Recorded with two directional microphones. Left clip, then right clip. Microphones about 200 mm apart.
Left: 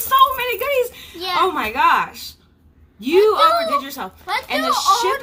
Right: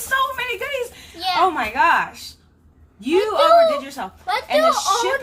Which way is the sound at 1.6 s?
5° left (ahead or behind).